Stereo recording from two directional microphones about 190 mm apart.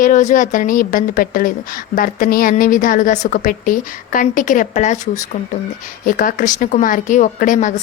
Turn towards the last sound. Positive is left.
turn(degrees=40)  # may be behind; listen again after turning